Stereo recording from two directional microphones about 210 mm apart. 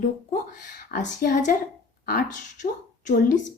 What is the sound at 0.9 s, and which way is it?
A woman's voice, 40° left (ahead or behind).